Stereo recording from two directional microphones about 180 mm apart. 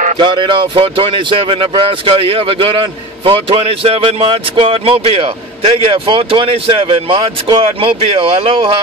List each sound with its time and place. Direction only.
0.2 s speech: 25° right (ahead or behind)